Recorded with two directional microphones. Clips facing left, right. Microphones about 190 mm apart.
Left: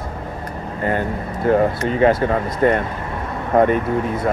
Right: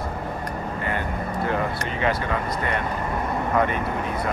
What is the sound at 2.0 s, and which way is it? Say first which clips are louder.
Speech: left 8 dB; 40° left (ahead or behind).